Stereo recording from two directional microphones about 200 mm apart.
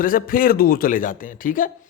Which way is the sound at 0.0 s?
45° left (ahead or behind).